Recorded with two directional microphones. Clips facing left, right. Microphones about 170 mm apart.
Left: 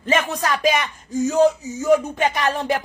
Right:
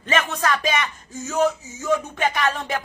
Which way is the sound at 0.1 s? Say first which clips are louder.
Left 3 dB; 10° left (ahead or behind).